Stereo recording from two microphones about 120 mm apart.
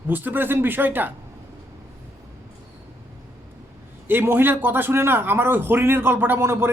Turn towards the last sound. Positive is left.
turn(degrees=-20)  # may be behind; listen again after turning